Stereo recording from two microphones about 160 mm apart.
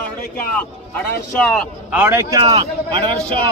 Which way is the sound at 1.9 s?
15° right (ahead or behind).